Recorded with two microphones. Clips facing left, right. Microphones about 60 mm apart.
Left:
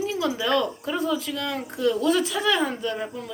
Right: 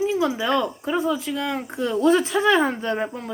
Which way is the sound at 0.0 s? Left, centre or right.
Right.